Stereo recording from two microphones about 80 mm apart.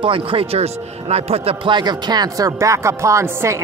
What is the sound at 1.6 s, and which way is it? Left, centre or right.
Speech, right.